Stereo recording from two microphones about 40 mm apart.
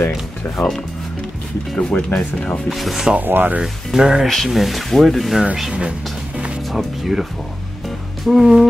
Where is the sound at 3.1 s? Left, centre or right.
Right.